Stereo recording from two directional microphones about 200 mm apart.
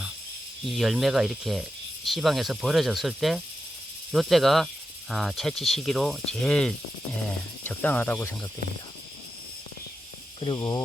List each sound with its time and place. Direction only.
0.6 s speech: centre (ahead or behind)
10.4 s speech: 20° left (ahead or behind)